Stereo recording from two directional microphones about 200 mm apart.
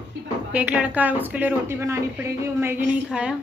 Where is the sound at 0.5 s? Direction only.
5° right (ahead or behind).